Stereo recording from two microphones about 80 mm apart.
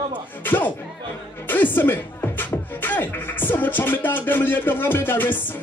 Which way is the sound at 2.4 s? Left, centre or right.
Left.